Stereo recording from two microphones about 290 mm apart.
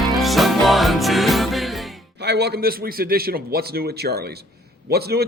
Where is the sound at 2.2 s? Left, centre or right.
Right.